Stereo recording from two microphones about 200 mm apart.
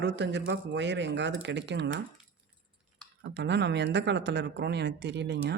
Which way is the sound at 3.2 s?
60° right (ahead or behind).